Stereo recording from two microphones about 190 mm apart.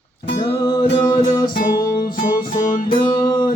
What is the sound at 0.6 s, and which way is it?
Music, 25° left (ahead or behind).